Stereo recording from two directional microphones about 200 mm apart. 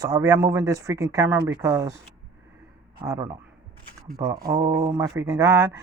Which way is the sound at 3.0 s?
15° right (ahead or behind).